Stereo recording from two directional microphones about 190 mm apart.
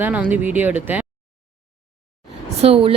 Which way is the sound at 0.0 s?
10° right (ahead or behind).